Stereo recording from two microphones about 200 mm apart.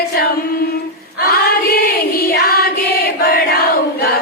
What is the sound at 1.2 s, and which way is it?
Choir, 50° left (ahead or behind).